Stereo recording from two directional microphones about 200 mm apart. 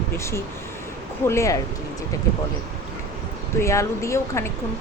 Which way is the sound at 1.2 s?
15° left (ahead or behind).